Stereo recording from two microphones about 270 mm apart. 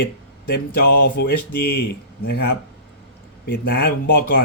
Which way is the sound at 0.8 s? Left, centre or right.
Left.